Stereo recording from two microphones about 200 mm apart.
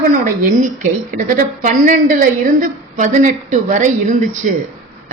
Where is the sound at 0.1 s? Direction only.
35° right (ahead or behind).